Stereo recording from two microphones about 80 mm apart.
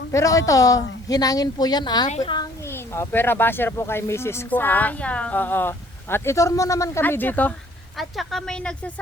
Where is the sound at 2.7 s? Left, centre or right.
Left.